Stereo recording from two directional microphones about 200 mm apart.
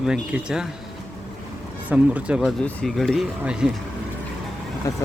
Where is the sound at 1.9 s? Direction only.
5° right (ahead or behind).